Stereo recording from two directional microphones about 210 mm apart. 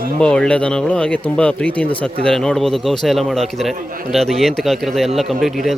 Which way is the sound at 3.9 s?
40° right (ahead or behind).